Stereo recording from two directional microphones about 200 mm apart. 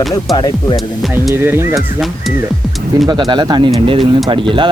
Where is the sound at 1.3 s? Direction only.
10° right (ahead or behind).